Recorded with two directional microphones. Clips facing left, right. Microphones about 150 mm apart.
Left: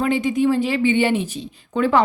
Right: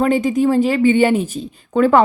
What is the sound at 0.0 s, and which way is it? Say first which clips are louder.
Speech: right 3 dB; 45° right (ahead or behind).